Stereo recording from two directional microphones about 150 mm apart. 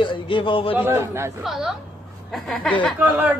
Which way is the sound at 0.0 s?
35° left (ahead or behind).